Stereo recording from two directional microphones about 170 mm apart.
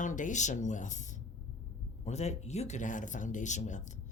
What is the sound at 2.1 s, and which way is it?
A woman's voice, 40° left (ahead or behind).